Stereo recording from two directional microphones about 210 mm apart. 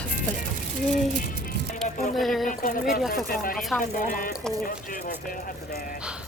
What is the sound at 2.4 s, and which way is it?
Speech, 40° left (ahead or behind).